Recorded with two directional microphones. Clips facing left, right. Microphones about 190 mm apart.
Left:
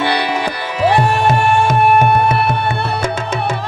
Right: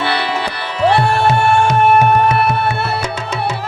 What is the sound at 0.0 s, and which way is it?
Music, 15° left (ahead or behind).